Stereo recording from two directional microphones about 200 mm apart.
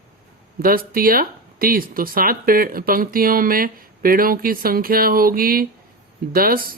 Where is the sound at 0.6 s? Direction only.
45° right (ahead or behind).